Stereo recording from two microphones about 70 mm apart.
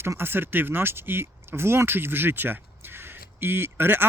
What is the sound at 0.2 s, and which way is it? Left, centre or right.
Speech, right.